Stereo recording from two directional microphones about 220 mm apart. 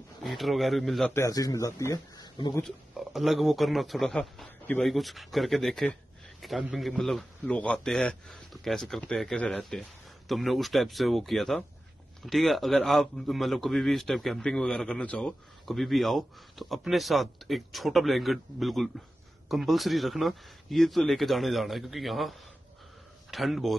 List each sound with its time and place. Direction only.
0.2 s a man's voice: centre (ahead or behind)
1.1 s speech: 15° left (ahead or behind)
2.6 s a man's voice: centre (ahead or behind)